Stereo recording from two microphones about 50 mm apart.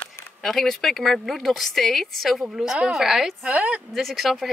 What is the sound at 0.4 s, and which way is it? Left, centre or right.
A woman's voice, centre.